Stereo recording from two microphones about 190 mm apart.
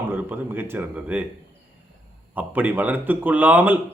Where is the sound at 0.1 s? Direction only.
10° right (ahead or behind).